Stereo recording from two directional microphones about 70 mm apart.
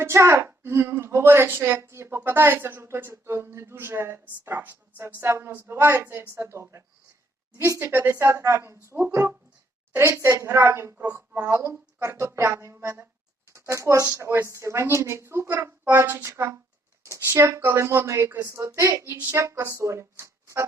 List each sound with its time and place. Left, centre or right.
0.0 s a woman's voice: right
7.8 s a woman's voice: right